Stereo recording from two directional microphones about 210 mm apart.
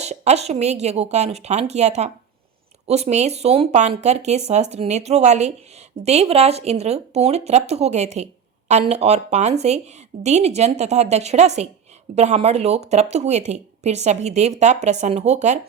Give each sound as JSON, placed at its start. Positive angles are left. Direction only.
{"t": 0.0, "sound": "speech", "side_deg": -30}